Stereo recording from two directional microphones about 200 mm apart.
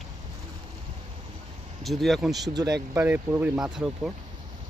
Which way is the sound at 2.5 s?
20° right (ahead or behind).